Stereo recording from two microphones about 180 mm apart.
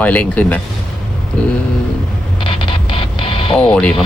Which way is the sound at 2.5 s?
30° left (ahead or behind).